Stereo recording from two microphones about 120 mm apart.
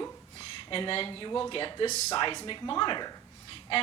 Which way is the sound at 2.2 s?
40° left (ahead or behind).